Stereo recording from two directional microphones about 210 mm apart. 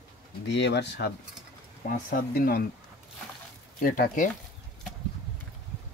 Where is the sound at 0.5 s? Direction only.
55° left (ahead or behind).